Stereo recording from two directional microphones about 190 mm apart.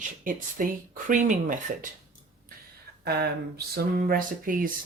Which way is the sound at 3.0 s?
55° right (ahead or behind).